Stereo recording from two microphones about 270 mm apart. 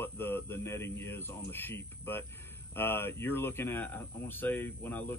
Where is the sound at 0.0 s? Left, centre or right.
Centre.